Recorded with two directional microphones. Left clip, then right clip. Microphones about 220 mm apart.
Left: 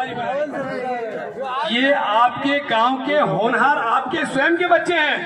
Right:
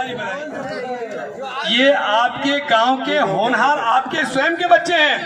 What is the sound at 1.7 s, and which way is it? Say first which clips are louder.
A man's voice: right 4 dB; 40° right (ahead or behind).